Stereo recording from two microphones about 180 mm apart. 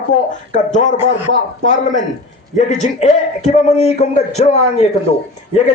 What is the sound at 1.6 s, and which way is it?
A man's voice, 45° left (ahead or behind).